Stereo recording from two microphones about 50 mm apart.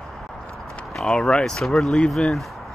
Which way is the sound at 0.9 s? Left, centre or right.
Centre.